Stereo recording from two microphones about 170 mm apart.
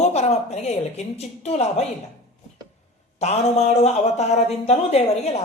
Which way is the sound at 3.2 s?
40° left (ahead or behind).